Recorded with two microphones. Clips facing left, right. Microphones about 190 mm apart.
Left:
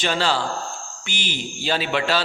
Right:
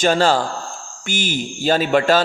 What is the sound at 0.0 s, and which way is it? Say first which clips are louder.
A man's voice: right 6 dB; 45° right (ahead or behind).